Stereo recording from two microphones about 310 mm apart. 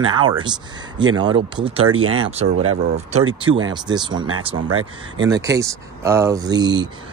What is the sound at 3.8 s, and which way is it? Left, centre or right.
Speech, centre.